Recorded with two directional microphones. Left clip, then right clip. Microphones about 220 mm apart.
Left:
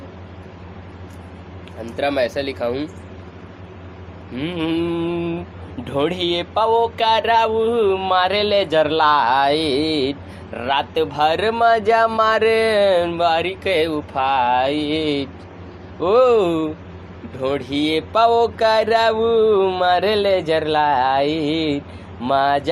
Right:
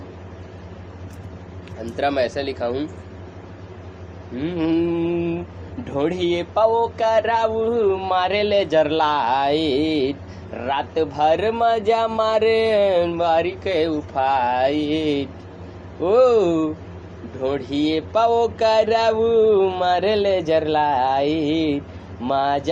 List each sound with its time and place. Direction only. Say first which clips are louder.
2.0 s a man's voice: left 1 dB; 20° left (ahead or behind)
4.4 s a man's voice: right 1 dB; 30° left (ahead or behind)
5.8 s a man's voice: left 1 dB; 30° left (ahead or behind)